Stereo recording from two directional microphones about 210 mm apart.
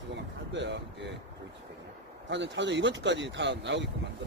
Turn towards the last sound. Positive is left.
turn(degrees=-60)  # may be behind; listen again after turning